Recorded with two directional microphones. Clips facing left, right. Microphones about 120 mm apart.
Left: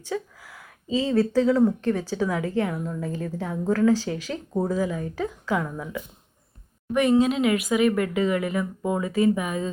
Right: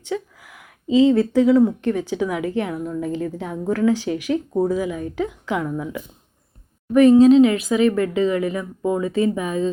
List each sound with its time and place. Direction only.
0.1 s speech: 20° right (ahead or behind)
2.7 s a woman's voice: 5° right (ahead or behind)
3.0 s speech: 20° right (ahead or behind)
6.9 s speech: 35° right (ahead or behind)